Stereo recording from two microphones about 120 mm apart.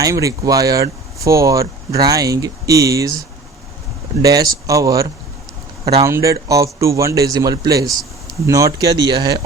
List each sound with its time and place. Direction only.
0.0 s speech: 25° right (ahead or behind)
4.2 s speech: 30° right (ahead or behind)